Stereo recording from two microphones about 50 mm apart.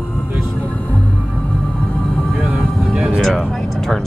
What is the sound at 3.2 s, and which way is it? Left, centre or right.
Music, centre.